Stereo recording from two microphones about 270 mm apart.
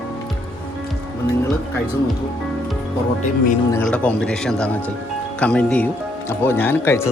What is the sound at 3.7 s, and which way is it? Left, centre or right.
Speech, centre.